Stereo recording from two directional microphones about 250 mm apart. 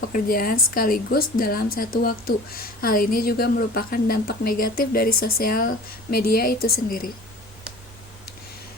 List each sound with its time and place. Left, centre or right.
0.1 s a woman's voice: left